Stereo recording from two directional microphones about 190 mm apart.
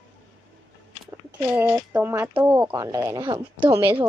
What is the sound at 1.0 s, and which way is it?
Speech, 10° right (ahead or behind).